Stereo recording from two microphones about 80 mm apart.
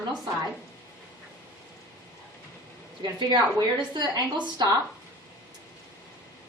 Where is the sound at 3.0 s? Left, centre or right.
Right.